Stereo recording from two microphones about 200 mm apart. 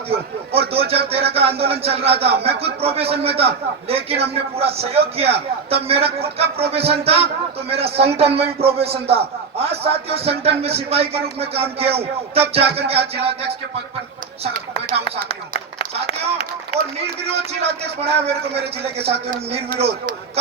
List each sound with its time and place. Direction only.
0.1 s a man's voice: 30° right (ahead or behind)
15.3 s speech: 30° left (ahead or behind)
17.2 s a man's voice: 30° right (ahead or behind)